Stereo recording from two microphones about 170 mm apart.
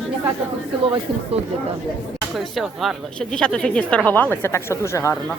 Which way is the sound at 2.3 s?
Centre (ahead or behind).